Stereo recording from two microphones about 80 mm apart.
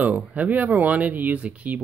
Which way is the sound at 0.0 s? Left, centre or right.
Centre.